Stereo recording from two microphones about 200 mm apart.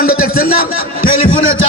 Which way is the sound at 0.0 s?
45° left (ahead or behind).